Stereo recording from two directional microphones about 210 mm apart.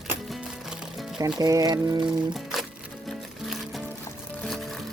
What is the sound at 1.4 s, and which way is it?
Speech, 15° right (ahead or behind).